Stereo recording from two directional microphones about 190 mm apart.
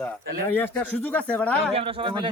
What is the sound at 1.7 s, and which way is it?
Speech, 30° right (ahead or behind).